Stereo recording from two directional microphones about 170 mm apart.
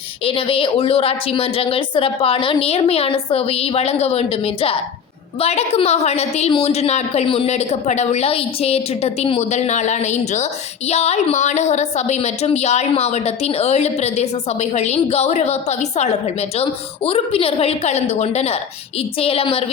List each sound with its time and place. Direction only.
0.3 s a woman's voice: 30° left (ahead or behind)